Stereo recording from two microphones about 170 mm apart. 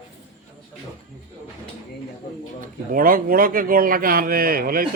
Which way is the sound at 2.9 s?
55° right (ahead or behind).